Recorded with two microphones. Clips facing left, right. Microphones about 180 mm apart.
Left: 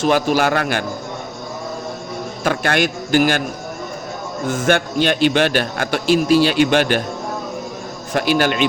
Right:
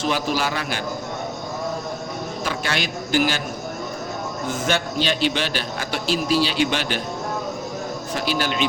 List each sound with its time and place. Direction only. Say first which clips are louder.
0.0 s a man's voice: left 7 dB; 55° left (ahead or behind)
2.4 s a man's voice: left 9 dB; 55° left (ahead or behind)
4.4 s a man's voice: left 7 dB; 50° left (ahead or behind)
8.1 s a man's voice: left 8 dB; 60° left (ahead or behind)